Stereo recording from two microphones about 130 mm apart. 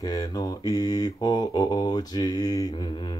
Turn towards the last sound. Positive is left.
turn(degrees=35)  # may be behind; listen again after turning